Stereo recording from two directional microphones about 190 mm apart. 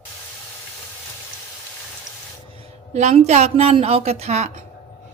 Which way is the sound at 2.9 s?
35° right (ahead or behind).